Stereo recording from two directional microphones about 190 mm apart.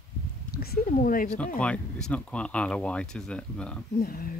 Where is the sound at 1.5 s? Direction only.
5° left (ahead or behind).